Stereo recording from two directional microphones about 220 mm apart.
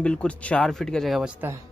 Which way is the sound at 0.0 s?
5° left (ahead or behind).